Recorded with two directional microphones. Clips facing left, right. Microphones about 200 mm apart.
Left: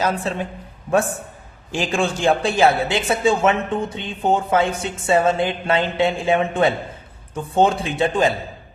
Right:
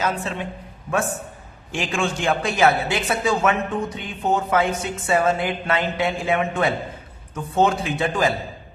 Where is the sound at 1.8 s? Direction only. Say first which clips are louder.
Left 4 dB; 35° left (ahead or behind).